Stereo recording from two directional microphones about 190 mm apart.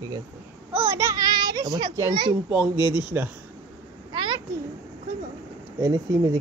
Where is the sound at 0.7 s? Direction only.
15° right (ahead or behind).